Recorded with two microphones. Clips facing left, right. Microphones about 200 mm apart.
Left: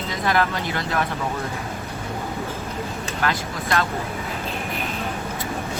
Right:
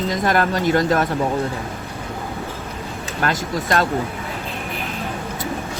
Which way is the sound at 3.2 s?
45° right (ahead or behind).